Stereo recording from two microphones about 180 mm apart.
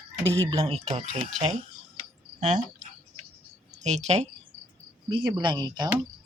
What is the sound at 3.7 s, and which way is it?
Speech, 40° right (ahead or behind).